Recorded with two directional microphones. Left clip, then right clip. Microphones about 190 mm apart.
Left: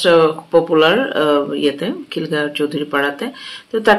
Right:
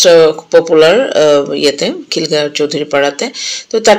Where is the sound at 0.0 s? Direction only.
15° right (ahead or behind).